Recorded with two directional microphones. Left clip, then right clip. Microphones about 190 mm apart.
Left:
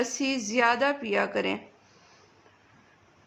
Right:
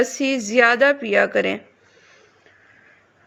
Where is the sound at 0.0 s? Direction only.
20° right (ahead or behind).